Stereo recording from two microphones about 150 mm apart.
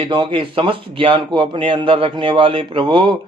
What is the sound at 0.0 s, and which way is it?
Speech, 30° right (ahead or behind).